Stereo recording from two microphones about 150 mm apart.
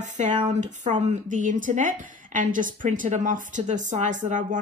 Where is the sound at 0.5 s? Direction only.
55° right (ahead or behind).